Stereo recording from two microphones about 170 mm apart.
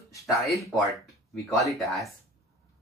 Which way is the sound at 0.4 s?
Centre (ahead or behind).